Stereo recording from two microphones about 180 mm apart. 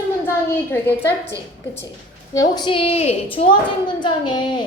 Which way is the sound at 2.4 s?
25° left (ahead or behind).